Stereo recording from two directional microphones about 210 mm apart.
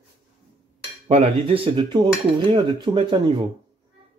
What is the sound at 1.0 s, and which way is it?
Speech, 25° right (ahead or behind).